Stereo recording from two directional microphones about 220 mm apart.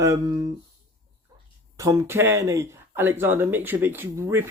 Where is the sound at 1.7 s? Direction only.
15° right (ahead or behind).